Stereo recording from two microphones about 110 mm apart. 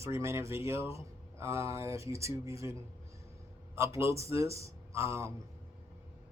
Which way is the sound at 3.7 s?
25° right (ahead or behind).